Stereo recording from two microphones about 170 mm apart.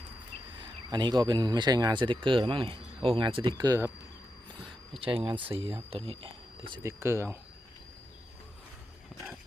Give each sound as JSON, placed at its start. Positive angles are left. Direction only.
{"t": 0.6, "sound": "speech", "side_deg": -25}
{"t": 4.6, "sound": "a sound", "side_deg": -30}
{"t": 5.6, "sound": "speech", "side_deg": -30}
{"t": 6.8, "sound": "speech", "side_deg": -15}